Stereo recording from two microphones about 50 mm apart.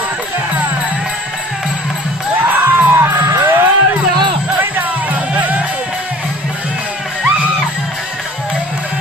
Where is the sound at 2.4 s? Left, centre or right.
Right.